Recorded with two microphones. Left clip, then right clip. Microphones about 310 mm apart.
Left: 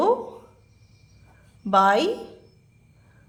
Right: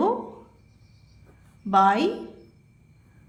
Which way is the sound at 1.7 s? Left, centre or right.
Centre.